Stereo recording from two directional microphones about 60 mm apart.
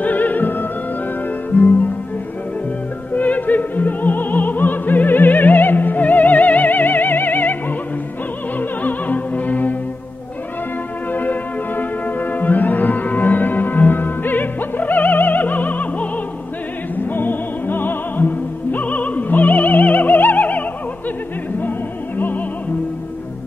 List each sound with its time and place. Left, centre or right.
0.0 s opera: left
1.5 s music: left
3.1 s opera: left
8.5 s opera: left
11.1 s music: left
17.1 s music: left